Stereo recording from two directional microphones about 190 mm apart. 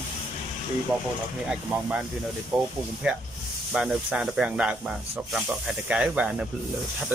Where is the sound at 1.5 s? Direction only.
5° right (ahead or behind).